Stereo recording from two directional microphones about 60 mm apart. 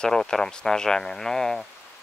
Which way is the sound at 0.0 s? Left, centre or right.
Centre.